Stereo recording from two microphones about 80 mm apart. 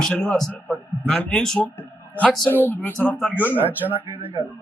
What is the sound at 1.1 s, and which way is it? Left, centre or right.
Speech, centre.